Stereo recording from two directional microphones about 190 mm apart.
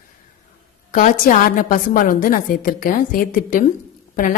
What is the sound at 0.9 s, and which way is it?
A woman's voice, 45° left (ahead or behind).